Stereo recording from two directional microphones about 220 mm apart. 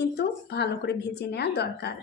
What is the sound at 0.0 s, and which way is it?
A woman's voice, 50° left (ahead or behind).